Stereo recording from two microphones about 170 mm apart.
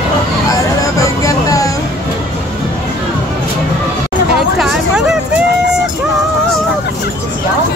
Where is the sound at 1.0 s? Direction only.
20° left (ahead or behind).